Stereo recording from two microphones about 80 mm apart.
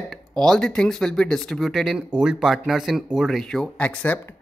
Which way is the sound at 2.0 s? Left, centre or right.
Centre.